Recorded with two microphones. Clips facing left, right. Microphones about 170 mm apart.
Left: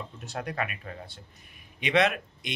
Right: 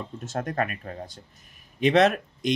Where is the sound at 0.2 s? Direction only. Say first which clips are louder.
Right 5 dB; 45° right (ahead or behind).